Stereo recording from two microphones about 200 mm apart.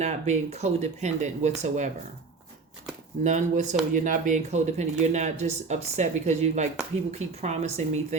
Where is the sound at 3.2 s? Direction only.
35° right (ahead or behind).